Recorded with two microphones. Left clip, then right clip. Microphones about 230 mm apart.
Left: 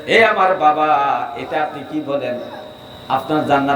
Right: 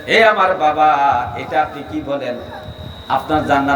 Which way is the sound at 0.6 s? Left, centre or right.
Right.